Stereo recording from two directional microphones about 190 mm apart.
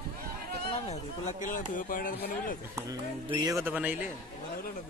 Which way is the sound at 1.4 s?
45° left (ahead or behind).